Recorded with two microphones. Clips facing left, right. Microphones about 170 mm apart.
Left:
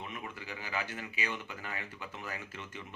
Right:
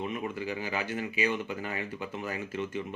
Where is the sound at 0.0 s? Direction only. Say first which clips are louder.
Right 10 dB; 15° right (ahead or behind).